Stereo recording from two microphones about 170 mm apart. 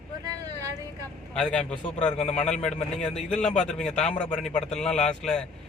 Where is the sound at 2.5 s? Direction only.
5° left (ahead or behind).